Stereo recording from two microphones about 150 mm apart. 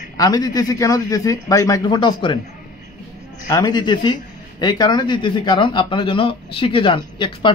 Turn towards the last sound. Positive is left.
turn(degrees=30)  # may be behind; listen again after turning